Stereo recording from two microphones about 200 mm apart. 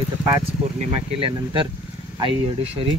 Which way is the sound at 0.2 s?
20° right (ahead or behind).